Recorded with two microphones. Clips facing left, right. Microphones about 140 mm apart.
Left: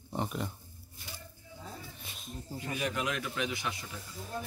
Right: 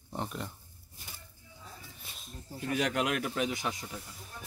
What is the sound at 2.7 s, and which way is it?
Speech, 70° right (ahead or behind).